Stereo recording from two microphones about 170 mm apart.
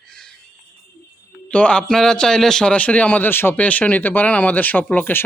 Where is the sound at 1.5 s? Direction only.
5° left (ahead or behind).